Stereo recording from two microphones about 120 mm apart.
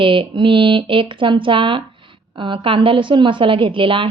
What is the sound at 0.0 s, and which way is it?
A woman's voice, 45° right (ahead or behind).